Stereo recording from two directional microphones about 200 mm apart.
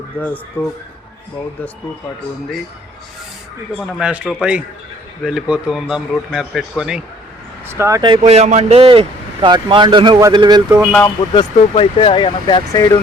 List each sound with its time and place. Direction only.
0.1 s speech: 10° left (ahead or behind)
3.8 s a man's voice: 5° right (ahead or behind)
7.7 s speech: 15° right (ahead or behind)
8.2 s speech: 35° right (ahead or behind)
11.3 s speech: 25° left (ahead or behind)